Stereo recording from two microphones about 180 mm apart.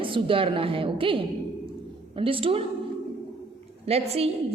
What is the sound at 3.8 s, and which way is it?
Speech, 35° right (ahead or behind).